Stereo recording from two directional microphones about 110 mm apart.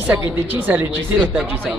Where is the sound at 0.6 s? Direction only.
20° right (ahead or behind).